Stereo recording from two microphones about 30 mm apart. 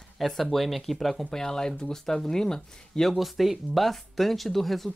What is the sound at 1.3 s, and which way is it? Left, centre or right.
Speech, left.